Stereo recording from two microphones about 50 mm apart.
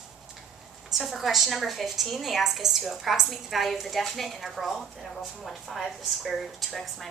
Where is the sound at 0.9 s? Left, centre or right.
Centre.